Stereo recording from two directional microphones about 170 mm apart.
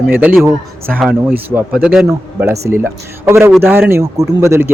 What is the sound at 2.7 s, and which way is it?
Speech, 15° right (ahead or behind).